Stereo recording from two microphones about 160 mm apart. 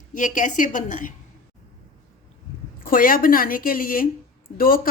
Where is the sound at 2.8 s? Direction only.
60° left (ahead or behind).